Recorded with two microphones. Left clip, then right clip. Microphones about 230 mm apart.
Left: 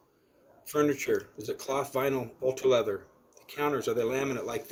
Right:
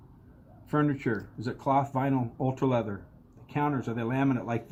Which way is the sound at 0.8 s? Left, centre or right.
Left.